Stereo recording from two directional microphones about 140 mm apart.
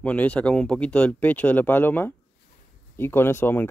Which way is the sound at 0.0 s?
10° left (ahead or behind).